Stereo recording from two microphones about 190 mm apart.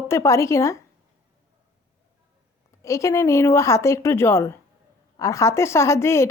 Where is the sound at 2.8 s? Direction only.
15° left (ahead or behind).